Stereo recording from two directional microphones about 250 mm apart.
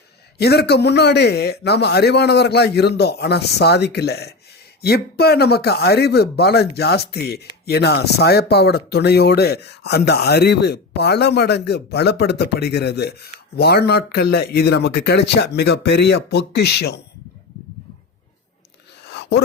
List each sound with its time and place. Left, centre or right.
0.3 s speech: left